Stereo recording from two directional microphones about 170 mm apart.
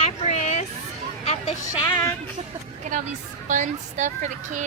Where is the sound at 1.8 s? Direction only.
15° left (ahead or behind).